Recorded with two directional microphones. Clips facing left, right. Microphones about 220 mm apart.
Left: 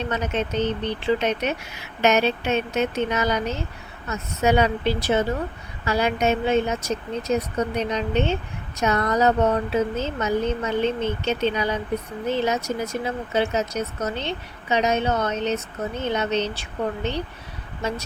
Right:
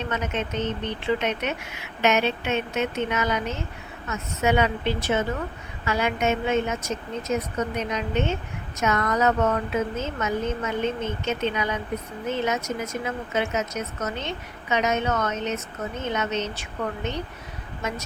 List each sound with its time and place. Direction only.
0.1 s speech: 35° left (ahead or behind)